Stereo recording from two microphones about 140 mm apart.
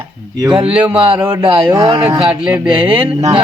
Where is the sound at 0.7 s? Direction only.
10° right (ahead or behind).